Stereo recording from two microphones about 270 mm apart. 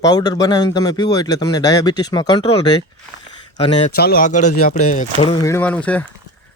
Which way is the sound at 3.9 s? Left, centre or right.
Left.